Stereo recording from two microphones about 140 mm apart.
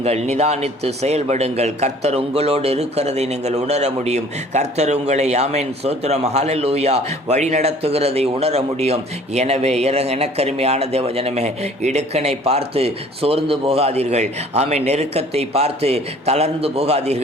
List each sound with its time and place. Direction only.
0.0 s a man's voice: 50° right (ahead or behind)